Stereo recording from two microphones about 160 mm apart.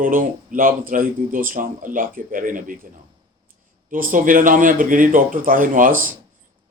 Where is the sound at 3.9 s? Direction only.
55° right (ahead or behind).